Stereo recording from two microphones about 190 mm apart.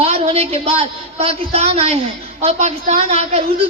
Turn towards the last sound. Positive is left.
turn(degrees=-35)  # may be behind; listen again after turning